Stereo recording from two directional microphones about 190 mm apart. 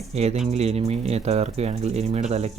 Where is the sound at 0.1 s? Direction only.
35° right (ahead or behind).